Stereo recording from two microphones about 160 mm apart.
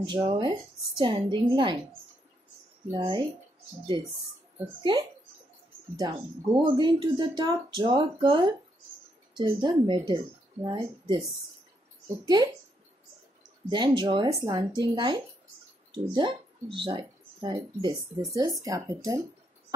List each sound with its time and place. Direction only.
0.0 s speech: 25° right (ahead or behind)
3.0 s speech: 30° right (ahead or behind)
4.9 s speech: 30° right (ahead or behind)
13.7 s speech: 30° right (ahead or behind)